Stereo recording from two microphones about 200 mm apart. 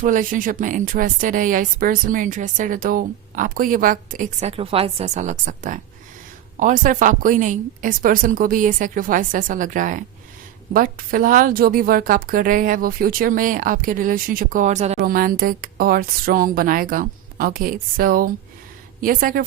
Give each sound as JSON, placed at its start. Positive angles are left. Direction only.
{"t": 0.0, "sound": "a woman's voice", "side_deg": -40}